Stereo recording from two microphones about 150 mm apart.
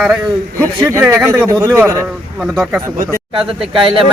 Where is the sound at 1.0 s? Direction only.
15° right (ahead or behind).